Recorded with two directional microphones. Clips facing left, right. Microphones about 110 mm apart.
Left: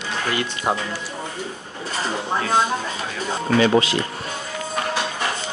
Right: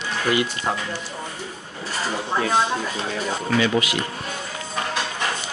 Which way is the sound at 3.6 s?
35° left (ahead or behind).